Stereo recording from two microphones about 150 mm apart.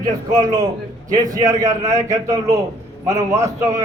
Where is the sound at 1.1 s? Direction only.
25° right (ahead or behind).